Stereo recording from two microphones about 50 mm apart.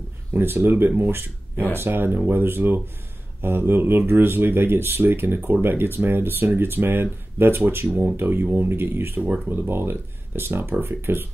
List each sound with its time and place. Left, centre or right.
0.3 s speech: right
9.2 s speech: right
9.7 s speech: right